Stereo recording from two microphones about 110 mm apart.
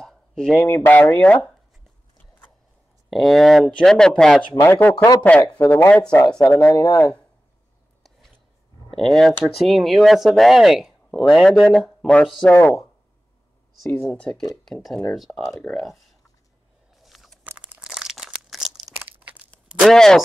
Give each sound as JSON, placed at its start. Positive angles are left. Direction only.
{"t": 0.0, "sound": "a sound", "side_deg": 0}
{"t": 0.7, "sound": "speech", "side_deg": 15}
{"t": 3.1, "sound": "speech", "side_deg": 0}
{"t": 4.6, "sound": "speech", "side_deg": 20}
{"t": 8.9, "sound": "speech", "side_deg": 5}
{"t": 12.5, "sound": "speech", "side_deg": 25}
{"t": 13.8, "sound": "speech", "side_deg": 20}
{"t": 15.7, "sound": "speech", "side_deg": 10}
{"t": 17.0, "sound": "crunch", "side_deg": 0}
{"t": 17.5, "sound": "crumpling", "side_deg": -10}
{"t": 18.9, "sound": "crumpling", "side_deg": -15}
{"t": 19.9, "sound": "speech", "side_deg": 5}